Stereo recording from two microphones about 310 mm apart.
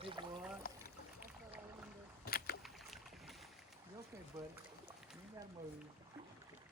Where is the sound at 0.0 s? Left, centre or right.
Centre.